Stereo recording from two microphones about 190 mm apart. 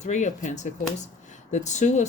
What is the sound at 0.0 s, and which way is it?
Speech, 40° left (ahead or behind).